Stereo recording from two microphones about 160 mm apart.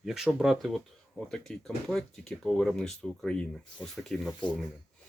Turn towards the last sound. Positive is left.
turn(degrees=0)  # may be behind; listen again after turning